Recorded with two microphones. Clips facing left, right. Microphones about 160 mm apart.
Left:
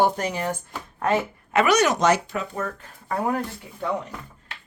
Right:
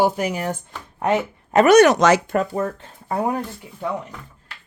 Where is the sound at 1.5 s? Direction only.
40° right (ahead or behind).